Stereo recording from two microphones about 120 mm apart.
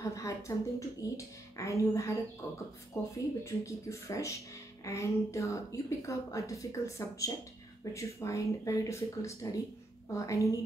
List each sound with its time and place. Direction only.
0.1 s a woman's voice: 25° left (ahead or behind)